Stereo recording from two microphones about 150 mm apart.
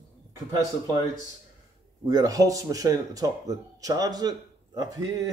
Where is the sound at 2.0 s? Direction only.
25° right (ahead or behind).